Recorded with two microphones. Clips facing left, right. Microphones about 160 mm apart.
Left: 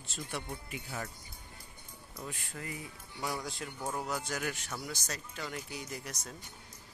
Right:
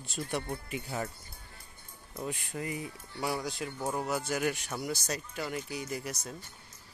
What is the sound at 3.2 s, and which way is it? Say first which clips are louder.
Speech: right 4 dB; 5° right (ahead or behind).